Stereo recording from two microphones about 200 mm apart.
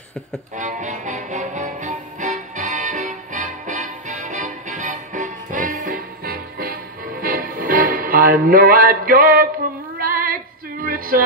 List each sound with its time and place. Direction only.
0.6 s music: 40° right (ahead or behind)
9.9 s female singing: 45° right (ahead or behind)
10.8 s a sound: 45° right (ahead or behind)